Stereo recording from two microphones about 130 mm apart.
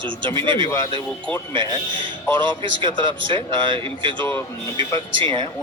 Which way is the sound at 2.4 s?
40° right (ahead or behind).